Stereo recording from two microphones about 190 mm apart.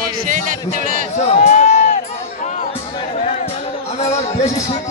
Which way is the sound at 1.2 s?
35° left (ahead or behind).